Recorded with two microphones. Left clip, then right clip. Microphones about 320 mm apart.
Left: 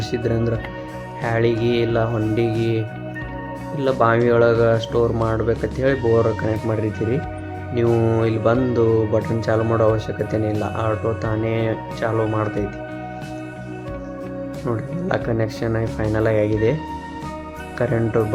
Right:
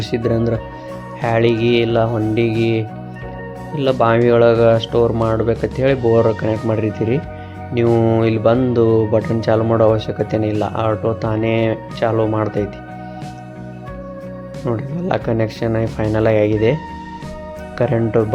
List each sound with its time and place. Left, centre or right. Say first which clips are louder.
0.1 s speech: right 4 dB; centre
14.6 s speech: right 5 dB; centre
17.7 s speech: right 4 dB; centre